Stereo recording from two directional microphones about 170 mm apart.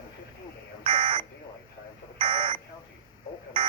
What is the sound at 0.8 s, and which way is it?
Buzzer, 30° right (ahead or behind).